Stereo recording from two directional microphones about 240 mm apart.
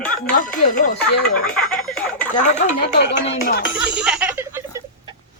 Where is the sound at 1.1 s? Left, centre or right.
Left.